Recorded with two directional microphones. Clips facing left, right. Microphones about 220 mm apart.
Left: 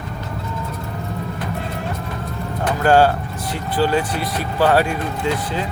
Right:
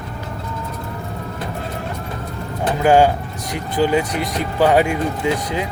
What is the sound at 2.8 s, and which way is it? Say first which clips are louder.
Speech: right 1 dB; 15° right (ahead or behind).